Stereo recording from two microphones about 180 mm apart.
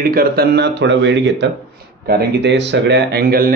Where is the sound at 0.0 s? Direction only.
55° right (ahead or behind); by 1.5 s 80° right.